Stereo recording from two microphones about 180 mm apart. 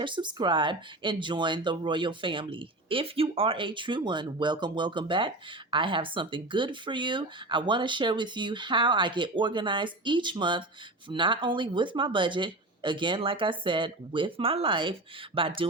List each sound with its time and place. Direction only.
0.0 s speech: 25° right (ahead or behind)